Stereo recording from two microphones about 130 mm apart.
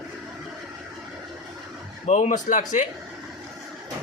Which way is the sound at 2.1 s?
70° left (ahead or behind).